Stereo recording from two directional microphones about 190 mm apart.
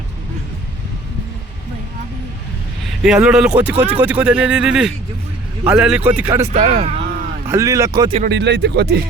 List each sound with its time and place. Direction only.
3.0 s speech: 5° right (ahead or behind)
6.5 s speech: 35° right (ahead or behind)
7.4 s speech: 15° right (ahead or behind)
8.3 s speech: 65° right (ahead or behind)